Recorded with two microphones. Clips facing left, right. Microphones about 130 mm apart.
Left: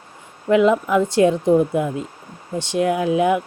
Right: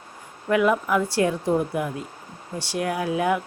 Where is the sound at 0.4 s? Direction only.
25° left (ahead or behind).